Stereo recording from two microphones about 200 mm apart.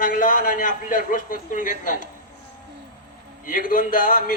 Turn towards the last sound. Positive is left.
turn(degrees=40)  # may be behind; listen again after turning